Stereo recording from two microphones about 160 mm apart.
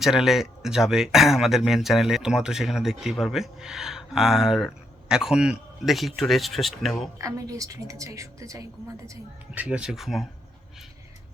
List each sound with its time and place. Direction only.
0.0 s speech: centre (ahead or behind)
7.2 s a woman's voice: 20° right (ahead or behind)
9.6 s speech: 5° right (ahead or behind)